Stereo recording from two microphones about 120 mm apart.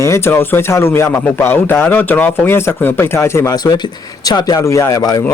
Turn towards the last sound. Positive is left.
turn(degrees=35)  # may be behind; listen again after turning